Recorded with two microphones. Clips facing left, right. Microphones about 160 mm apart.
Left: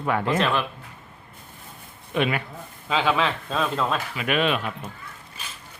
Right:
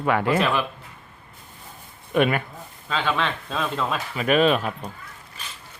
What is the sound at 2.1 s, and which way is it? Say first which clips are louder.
Speech: right 4 dB; 50° right (ahead or behind).